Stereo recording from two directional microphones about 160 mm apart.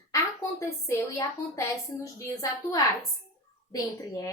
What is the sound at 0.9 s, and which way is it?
A woman's voice, 20° left (ahead or behind).